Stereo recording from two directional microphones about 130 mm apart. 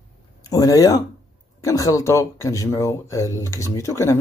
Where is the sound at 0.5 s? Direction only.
25° left (ahead or behind).